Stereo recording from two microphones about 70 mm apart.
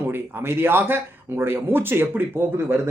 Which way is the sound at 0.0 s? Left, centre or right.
Right.